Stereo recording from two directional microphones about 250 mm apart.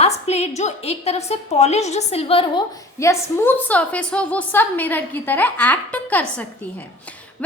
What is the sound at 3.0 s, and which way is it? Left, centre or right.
A woman's voice, centre.